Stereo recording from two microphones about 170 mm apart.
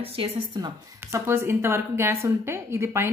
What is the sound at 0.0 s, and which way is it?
Speech, 35° right (ahead or behind).